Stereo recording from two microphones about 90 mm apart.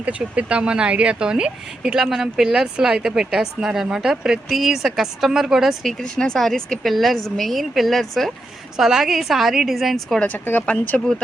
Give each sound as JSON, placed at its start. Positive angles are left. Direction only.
{"t": 0.0, "sound": "a woman's voice", "side_deg": -15}
{"t": 10.2, "sound": "speech", "side_deg": 20}